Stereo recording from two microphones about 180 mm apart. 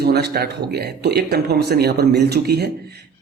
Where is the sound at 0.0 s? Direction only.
65° right (ahead or behind).